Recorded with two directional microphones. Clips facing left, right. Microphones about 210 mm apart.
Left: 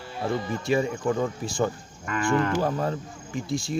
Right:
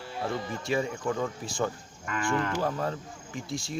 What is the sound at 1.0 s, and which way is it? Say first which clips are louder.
Speech: left 5 dB; 25° left (ahead or behind).